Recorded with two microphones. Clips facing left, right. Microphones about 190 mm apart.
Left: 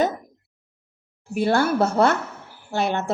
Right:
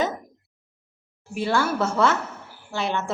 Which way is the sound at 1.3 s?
50° left (ahead or behind).